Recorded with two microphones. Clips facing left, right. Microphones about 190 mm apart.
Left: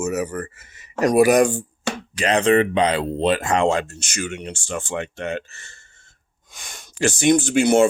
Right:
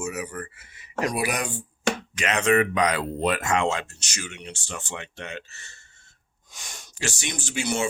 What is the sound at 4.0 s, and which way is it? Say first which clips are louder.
Speech: left 9 dB; 50° left (ahead or behind).